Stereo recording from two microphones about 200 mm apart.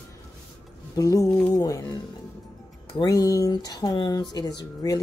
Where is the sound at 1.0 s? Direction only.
15° left (ahead or behind).